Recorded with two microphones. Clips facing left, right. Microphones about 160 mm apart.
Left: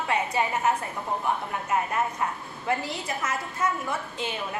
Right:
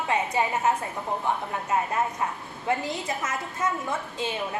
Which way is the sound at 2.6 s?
20° right (ahead or behind).